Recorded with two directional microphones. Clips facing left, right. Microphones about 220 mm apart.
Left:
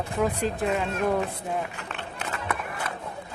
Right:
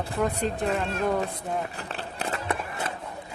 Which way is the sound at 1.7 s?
35° right (ahead or behind).